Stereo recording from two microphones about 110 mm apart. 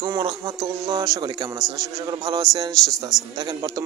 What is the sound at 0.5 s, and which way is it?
A man's voice, 35° right (ahead or behind).